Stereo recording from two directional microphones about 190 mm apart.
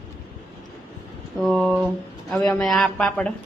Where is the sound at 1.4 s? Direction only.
Centre (ahead or behind).